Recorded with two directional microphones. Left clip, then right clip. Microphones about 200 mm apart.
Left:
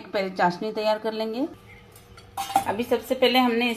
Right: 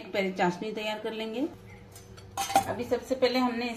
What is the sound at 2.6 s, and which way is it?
Speech, 45° left (ahead or behind).